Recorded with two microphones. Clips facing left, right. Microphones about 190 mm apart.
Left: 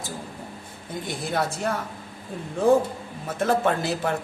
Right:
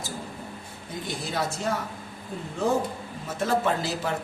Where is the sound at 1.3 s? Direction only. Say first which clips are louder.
Left 3 dB; 55° left (ahead or behind).